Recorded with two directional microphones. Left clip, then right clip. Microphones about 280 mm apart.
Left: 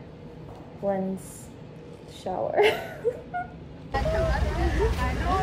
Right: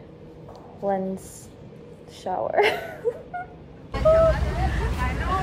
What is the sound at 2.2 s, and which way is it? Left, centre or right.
Speech, centre.